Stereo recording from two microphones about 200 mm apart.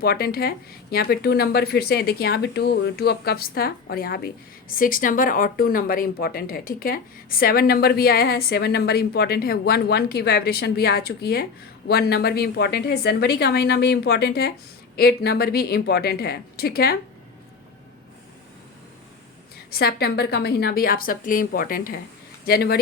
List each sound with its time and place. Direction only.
0.0 s speech: 50° left (ahead or behind)
19.7 s speech: 55° left (ahead or behind)